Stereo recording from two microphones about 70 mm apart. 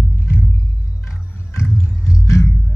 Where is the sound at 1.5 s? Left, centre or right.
Left.